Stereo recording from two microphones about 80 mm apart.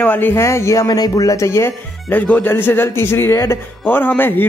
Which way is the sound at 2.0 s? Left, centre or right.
Left.